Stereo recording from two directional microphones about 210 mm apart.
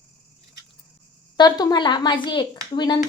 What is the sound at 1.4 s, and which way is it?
A woman's voice, 20° left (ahead or behind).